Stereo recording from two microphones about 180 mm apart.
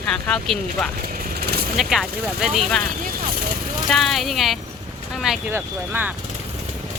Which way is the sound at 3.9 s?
Centre (ahead or behind).